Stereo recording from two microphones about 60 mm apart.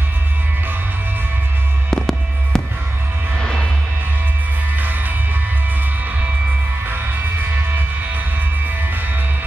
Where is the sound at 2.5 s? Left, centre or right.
Centre.